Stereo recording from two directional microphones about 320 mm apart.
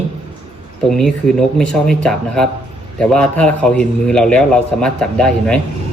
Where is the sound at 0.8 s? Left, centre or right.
Centre.